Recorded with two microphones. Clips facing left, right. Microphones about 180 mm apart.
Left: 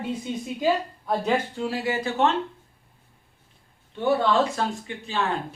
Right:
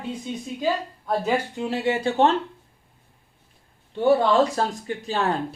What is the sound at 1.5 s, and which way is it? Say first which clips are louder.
Speech: right 2 dB; 20° right (ahead or behind).